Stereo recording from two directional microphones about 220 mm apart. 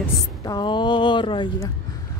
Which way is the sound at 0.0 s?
20° left (ahead or behind).